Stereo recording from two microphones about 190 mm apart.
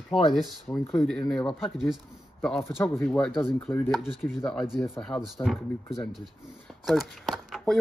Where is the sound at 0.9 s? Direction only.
5° left (ahead or behind).